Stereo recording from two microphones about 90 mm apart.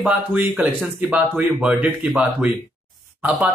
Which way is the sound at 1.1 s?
10° right (ahead or behind).